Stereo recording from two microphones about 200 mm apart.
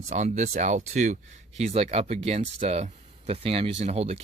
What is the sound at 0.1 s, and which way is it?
Speech, 35° right (ahead or behind).